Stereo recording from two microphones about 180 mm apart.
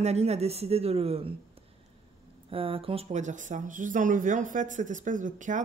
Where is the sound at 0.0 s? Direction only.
35° right (ahead or behind).